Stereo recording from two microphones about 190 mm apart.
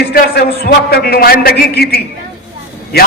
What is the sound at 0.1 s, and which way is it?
A man's voice, 55° left (ahead or behind).